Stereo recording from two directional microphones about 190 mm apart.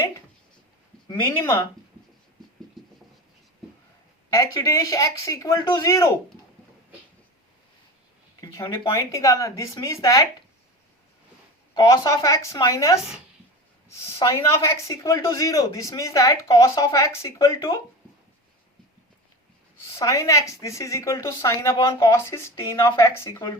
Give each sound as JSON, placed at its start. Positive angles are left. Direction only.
{"t": 1.0, "sound": "speech", "side_deg": 25}
{"t": 2.8, "sound": "a sound", "side_deg": 0}
{"t": 4.3, "sound": "speech", "side_deg": 15}
{"t": 8.4, "sound": "speech", "side_deg": 20}
{"t": 11.7, "sound": "speech", "side_deg": 20}
{"t": 20.0, "sound": "speech", "side_deg": 15}